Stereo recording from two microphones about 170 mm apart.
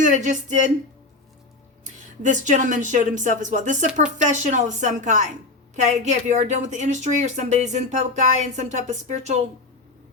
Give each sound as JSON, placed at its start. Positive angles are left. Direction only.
{"t": 0.0, "sound": "speech", "side_deg": -45}
{"t": 1.8, "sound": "speech", "side_deg": -45}